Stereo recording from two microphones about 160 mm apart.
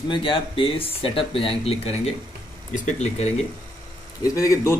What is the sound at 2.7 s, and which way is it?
Speech, 45° left (ahead or behind).